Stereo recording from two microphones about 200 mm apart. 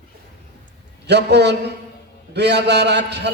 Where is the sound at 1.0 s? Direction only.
55° right (ahead or behind).